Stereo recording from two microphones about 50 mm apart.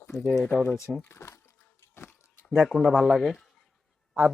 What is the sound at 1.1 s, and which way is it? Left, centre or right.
Speech, left.